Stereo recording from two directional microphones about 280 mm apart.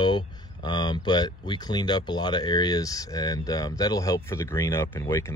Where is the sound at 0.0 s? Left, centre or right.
Centre.